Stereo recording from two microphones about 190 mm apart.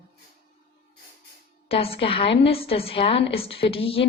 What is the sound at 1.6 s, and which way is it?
A woman's voice, 30° left (ahead or behind).